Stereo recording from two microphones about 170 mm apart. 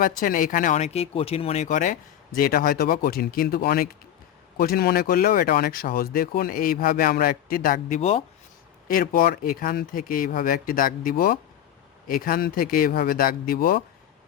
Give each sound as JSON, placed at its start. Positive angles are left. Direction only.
{"t": 0.0, "sound": "speech", "side_deg": 55}
{"t": 8.9, "sound": "speech", "side_deg": 60}